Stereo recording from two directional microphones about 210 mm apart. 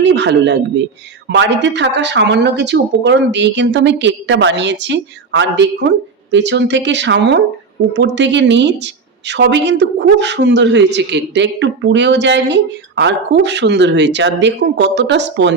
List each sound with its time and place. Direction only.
0.0 s a woman's voice: 55° right (ahead or behind)